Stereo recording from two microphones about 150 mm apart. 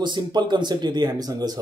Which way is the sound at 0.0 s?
30° right (ahead or behind).